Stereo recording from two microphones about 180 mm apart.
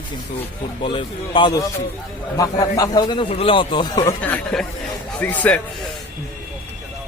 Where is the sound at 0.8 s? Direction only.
30° left (ahead or behind).